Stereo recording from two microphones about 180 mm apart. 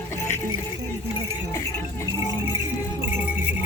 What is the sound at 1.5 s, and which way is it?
Music, 15° left (ahead or behind).